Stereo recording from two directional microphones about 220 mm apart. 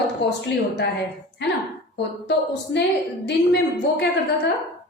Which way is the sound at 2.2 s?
50° left (ahead or behind).